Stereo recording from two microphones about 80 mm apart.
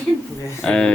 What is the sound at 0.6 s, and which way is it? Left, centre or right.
Speech, centre.